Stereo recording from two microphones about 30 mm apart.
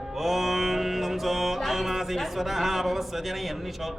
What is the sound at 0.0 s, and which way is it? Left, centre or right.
Mantra, centre.